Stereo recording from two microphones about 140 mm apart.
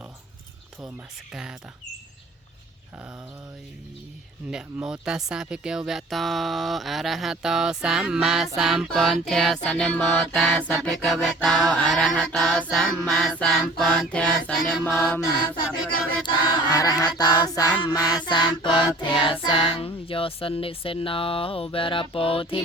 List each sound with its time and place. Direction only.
1.3 s speech: 5° right (ahead or behind)
4.5 s speech: 5° right (ahead or behind)
14.8 s mantra: 15° left (ahead or behind)
16.2 s chant: 30° left (ahead or behind)
17.8 s music: 30° left (ahead or behind)